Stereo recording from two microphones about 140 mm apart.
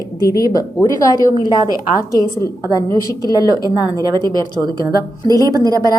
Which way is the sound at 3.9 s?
30° right (ahead or behind).